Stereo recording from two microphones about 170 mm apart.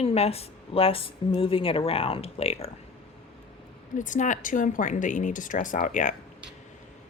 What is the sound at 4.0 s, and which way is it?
Speech, 50° left (ahead or behind).